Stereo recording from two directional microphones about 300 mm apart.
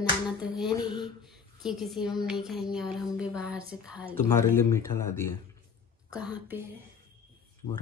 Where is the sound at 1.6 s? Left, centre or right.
Centre.